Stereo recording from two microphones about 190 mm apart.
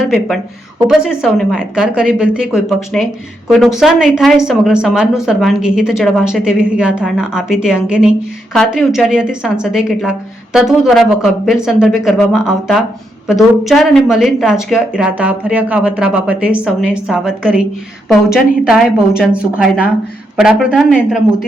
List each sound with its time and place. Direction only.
0.9 s speech: centre (ahead or behind)